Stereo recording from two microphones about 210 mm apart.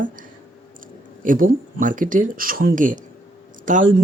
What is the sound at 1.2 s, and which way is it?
Speech, 40° right (ahead or behind).